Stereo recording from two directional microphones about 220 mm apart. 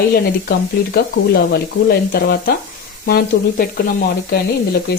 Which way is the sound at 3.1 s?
40° left (ahead or behind).